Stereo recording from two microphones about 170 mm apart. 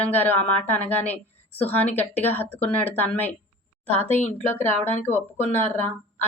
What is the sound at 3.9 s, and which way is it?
Speech, 35° right (ahead or behind).